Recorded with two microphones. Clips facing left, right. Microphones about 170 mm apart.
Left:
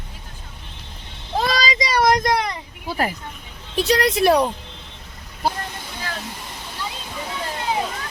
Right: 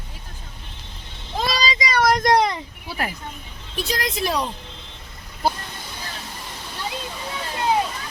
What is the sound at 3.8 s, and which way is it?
Speech, 65° left (ahead or behind).